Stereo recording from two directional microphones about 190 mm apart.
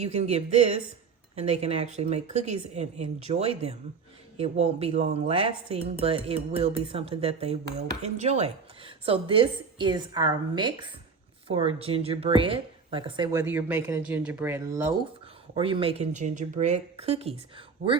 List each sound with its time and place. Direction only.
0.0 s speech: 35° right (ahead or behind)
5.3 s dishes: 30° right (ahead or behind)
13.4 s speech: 10° right (ahead or behind)
15.5 s speech: 30° right (ahead or behind)